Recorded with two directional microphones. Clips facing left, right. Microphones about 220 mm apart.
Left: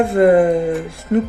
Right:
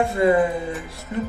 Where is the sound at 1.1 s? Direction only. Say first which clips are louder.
Left 10 dB; 70° left (ahead or behind).